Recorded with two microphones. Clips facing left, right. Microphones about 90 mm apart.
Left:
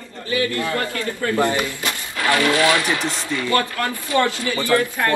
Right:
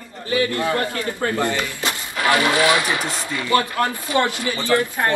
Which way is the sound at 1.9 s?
20° right (ahead or behind).